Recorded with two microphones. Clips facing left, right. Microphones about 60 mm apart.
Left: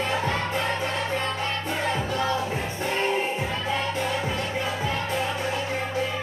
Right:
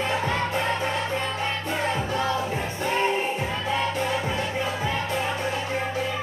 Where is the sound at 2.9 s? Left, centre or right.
Centre.